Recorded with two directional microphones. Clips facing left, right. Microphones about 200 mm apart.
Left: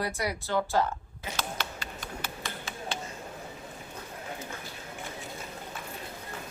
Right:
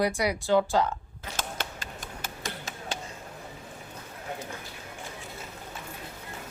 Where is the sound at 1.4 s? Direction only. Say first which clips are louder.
Right 1 dB; 45° right (ahead or behind).